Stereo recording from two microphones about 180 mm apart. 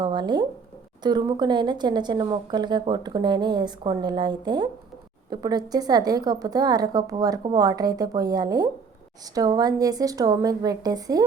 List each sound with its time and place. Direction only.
0.0 s a woman's voice: 25° right (ahead or behind)